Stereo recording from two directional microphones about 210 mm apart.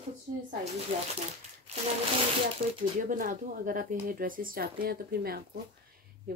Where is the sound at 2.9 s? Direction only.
40° right (ahead or behind).